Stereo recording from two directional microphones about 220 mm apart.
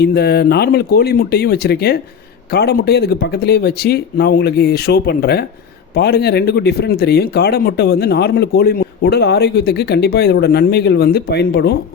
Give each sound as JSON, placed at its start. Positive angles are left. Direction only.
{"t": 0.0, "sound": "speech", "side_deg": 45}